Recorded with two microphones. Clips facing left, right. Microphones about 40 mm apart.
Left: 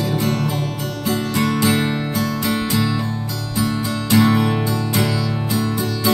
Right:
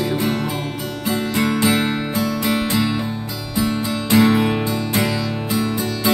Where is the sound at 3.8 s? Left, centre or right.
Centre.